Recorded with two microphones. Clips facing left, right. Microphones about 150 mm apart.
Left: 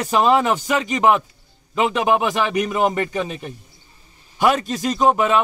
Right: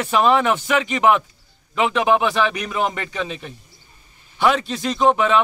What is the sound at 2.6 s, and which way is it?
Speech, 35° left (ahead or behind).